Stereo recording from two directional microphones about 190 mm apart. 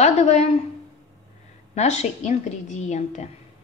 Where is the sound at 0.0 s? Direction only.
35° left (ahead or behind).